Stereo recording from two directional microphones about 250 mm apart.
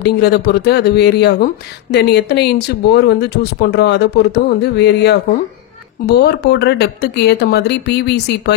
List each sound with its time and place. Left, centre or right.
0.0 s speech: left